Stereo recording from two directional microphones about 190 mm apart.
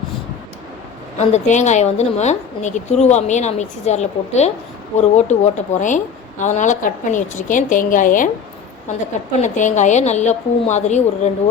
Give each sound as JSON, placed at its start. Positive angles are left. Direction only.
{"t": 1.2, "sound": "a woman's voice", "side_deg": 40}
{"t": 9.4, "sound": "a woman's voice", "side_deg": 40}